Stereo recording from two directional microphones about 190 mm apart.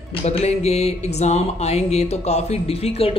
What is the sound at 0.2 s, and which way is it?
Music, 35° left (ahead or behind).